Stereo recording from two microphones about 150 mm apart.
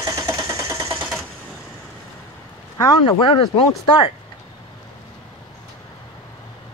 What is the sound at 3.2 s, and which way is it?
Speech, 35° left (ahead or behind).